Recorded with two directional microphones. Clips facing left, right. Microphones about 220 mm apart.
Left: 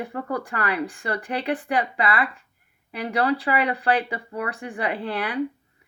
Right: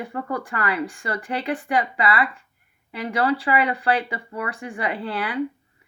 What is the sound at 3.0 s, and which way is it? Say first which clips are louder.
Speech: right 1 dB; 40° left (ahead or behind).